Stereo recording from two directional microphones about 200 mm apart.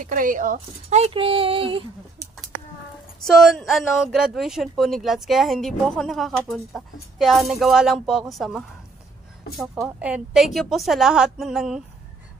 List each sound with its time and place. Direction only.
0.0 s speech: 40° right (ahead or behind); by 1.9 s 25° right (ahead or behind)
3.3 s speech: centre (ahead or behind)
9.8 s speech: 5° right (ahead or behind)